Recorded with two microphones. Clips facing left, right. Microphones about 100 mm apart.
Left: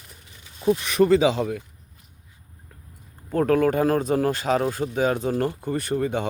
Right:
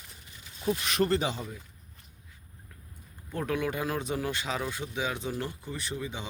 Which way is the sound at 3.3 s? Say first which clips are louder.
Left 11 dB; 45° left (ahead or behind).